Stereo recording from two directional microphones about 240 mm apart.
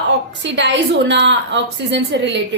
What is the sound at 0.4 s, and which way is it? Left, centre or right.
A woman's voice, right.